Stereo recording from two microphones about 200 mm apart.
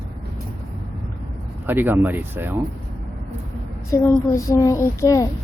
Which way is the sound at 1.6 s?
10° right (ahead or behind).